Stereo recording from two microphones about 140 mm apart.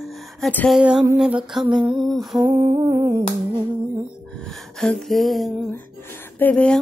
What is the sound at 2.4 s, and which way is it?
Humming, 20° right (ahead or behind).